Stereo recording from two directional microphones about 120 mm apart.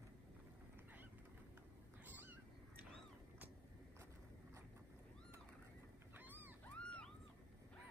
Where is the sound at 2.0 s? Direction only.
15° right (ahead or behind).